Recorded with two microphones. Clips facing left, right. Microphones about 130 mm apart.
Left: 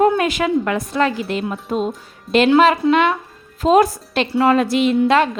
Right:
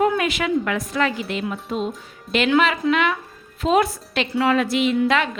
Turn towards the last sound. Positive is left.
turn(degrees=35)  # may be behind; listen again after turning